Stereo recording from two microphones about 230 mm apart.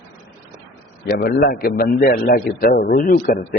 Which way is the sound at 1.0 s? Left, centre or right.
Left.